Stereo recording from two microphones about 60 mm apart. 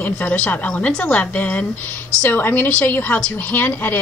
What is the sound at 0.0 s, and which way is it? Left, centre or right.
A woman's voice, left.